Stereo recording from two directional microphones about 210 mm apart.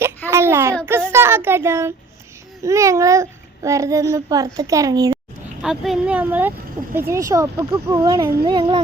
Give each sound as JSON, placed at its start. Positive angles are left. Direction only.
{"t": 0.3, "sound": "a sound", "side_deg": -10}
{"t": 2.6, "sound": "a child's voice", "side_deg": -15}
{"t": 5.6, "sound": "speech", "side_deg": 0}